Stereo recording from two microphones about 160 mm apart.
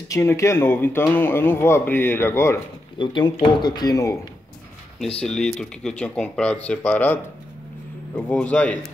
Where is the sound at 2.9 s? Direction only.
30° left (ahead or behind).